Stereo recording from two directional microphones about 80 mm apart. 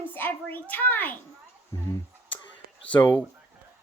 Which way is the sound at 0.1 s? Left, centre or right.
Left.